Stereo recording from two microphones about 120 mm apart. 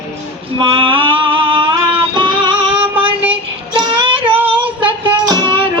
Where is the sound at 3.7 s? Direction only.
45° right (ahead or behind).